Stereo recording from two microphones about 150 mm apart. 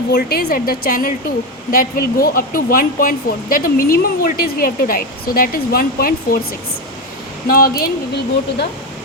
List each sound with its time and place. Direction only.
0.1 s speech: 90° left
7.4 s speech: 75° left (ahead or behind)